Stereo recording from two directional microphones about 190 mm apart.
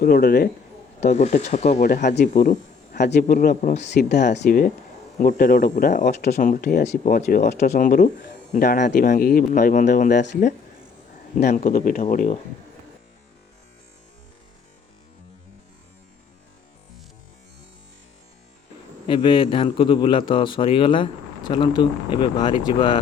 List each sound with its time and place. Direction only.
0.0 s speech: 50° left (ahead or behind)
1.0 s speech: 35° left (ahead or behind)
1.9 s speech: 50° left (ahead or behind)
3.0 s speech: 55° left (ahead or behind)
3.8 s speech: 65° left (ahead or behind)
4.4 s speech: 50° left (ahead or behind)
6.8 s speech: 40° left (ahead or behind)
19.0 s a man's voice: 25° left (ahead or behind)